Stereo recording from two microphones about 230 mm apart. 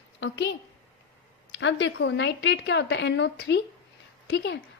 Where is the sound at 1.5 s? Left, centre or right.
Left.